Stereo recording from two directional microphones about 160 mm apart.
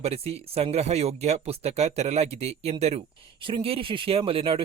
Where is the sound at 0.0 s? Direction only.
40° right (ahead or behind).